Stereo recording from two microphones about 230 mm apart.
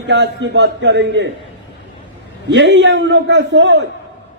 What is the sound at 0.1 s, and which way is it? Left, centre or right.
A man's voice, right.